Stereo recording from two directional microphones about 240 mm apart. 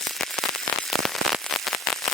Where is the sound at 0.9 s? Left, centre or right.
Centre.